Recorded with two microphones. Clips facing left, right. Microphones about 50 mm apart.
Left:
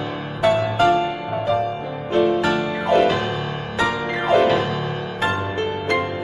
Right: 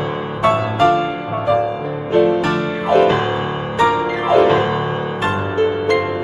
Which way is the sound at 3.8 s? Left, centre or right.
Centre.